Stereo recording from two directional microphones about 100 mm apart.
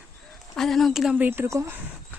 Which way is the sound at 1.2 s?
20° right (ahead or behind).